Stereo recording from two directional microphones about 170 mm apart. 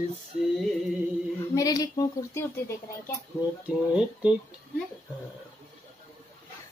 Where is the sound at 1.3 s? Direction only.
20° left (ahead or behind).